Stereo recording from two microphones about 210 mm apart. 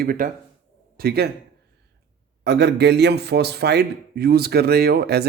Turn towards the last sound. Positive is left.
turn(degrees=-50)  # may be behind; listen again after turning